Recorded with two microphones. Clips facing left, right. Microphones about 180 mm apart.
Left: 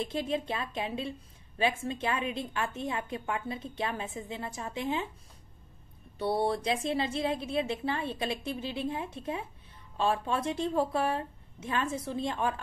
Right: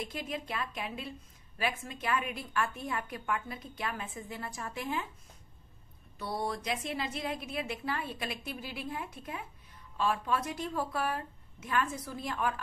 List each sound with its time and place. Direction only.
0.0 s a woman's voice: 25° left (ahead or behind)
6.1 s a woman's voice: 30° left (ahead or behind)